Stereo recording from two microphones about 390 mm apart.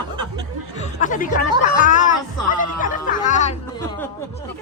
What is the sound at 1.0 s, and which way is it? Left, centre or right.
Speech, centre.